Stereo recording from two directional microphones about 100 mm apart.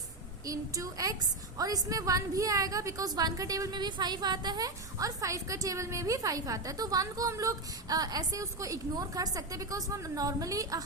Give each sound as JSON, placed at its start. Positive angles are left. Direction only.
{"t": 0.4, "sound": "a woman's voice", "side_deg": -35}